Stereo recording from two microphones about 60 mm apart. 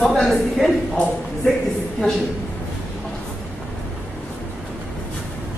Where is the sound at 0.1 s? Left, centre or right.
Centre.